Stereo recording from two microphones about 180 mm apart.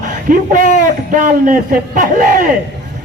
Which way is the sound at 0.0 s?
45° right (ahead or behind).